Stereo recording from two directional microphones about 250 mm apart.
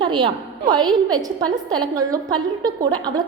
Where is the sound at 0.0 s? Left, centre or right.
Centre.